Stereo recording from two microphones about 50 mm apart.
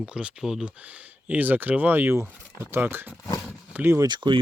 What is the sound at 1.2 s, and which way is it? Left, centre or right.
Speech, right.